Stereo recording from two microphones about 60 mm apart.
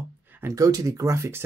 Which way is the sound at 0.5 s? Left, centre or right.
Right.